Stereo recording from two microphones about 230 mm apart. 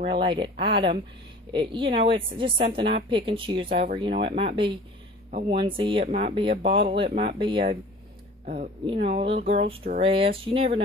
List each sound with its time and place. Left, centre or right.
0.0 s a woman's voice: right
8.8 s a woman's voice: right